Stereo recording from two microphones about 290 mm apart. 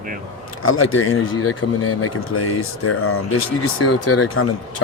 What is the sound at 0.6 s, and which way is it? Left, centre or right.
Speech, left.